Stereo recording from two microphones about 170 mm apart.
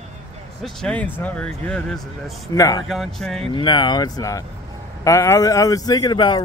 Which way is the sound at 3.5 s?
25° left (ahead or behind).